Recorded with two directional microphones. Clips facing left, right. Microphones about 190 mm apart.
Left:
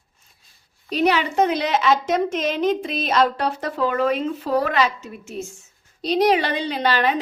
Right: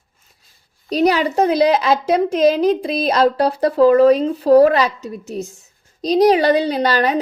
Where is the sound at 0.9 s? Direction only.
40° right (ahead or behind).